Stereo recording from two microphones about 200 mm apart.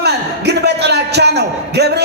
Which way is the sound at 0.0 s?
55° right (ahead or behind).